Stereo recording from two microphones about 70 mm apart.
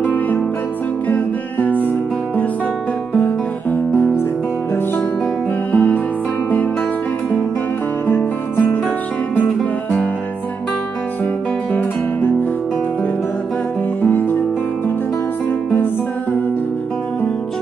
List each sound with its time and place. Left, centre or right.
0.0 s music: left
3.7 s music: left
5.7 s music: centre
8.1 s music: left
14.0 s music: left